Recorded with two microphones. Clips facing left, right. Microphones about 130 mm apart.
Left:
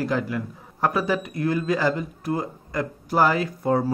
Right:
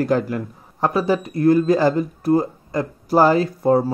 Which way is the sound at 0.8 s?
30° right (ahead or behind).